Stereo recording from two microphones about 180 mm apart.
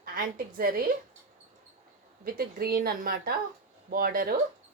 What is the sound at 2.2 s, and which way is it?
A woman's voice, 55° right (ahead or behind).